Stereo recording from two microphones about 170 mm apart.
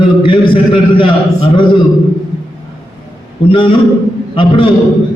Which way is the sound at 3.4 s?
30° left (ahead or behind).